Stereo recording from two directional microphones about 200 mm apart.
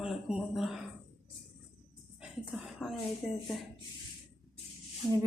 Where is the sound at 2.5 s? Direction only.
Centre (ahead or behind).